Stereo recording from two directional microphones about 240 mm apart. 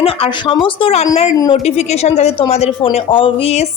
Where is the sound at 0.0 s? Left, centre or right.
Left.